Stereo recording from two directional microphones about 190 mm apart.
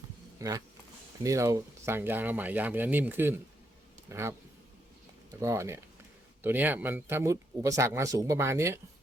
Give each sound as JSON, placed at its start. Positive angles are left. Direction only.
{"t": 0.3, "sound": "speech", "side_deg": -20}
{"t": 5.4, "sound": "speech", "side_deg": -15}